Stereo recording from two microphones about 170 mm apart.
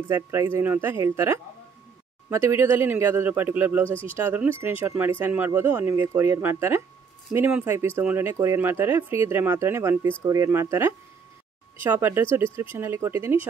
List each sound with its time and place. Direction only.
0.1 s speech: 15° right (ahead or behind)